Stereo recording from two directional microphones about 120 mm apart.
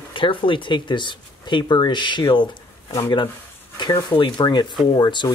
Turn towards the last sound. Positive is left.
turn(degrees=40)  # may be behind; listen again after turning